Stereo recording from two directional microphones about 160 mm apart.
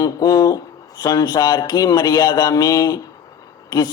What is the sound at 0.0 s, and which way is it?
A man's voice, 25° left (ahead or behind).